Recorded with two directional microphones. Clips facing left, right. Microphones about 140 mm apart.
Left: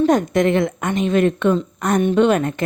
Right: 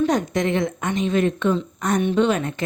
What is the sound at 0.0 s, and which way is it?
A woman's voice, 50° left (ahead or behind).